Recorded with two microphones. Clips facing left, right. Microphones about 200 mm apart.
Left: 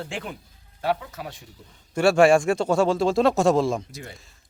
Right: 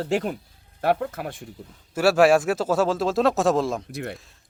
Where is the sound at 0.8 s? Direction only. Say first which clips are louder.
Right 4 dB; 55° right (ahead or behind).